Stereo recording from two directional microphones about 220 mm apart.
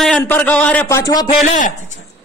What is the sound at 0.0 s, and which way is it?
A man's voice, 5° left (ahead or behind).